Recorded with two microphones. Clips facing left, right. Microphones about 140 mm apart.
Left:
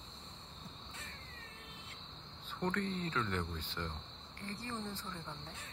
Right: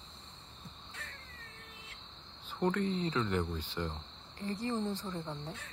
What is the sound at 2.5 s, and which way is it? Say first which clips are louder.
Speech: right 5 dB; 10° right (ahead or behind).